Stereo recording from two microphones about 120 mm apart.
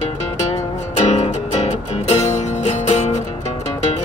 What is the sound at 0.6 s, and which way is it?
Music, 70° left (ahead or behind).